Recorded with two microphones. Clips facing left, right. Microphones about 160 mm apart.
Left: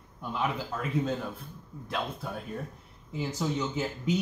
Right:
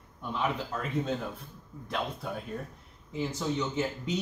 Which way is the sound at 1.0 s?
Centre (ahead or behind).